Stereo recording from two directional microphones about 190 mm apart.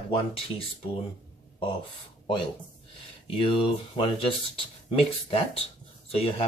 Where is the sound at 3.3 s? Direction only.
30° left (ahead or behind).